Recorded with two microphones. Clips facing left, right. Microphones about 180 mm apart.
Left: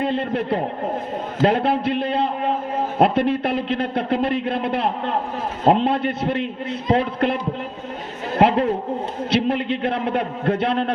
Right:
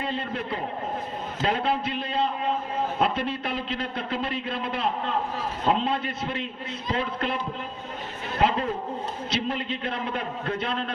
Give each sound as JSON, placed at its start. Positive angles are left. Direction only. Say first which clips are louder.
{"t": 0.0, "sound": "speech", "louder": "left 8 dB", "side_deg": 60}
{"t": 8.4, "sound": "speech", "louder": "left 7 dB", "side_deg": 60}